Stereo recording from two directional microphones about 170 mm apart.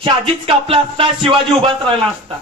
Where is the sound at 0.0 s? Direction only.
30° right (ahead or behind).